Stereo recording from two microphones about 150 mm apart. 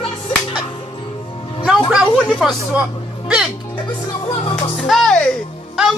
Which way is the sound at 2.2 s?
5° left (ahead or behind).